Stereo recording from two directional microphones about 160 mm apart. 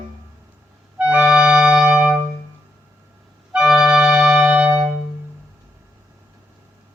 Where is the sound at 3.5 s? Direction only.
5° right (ahead or behind).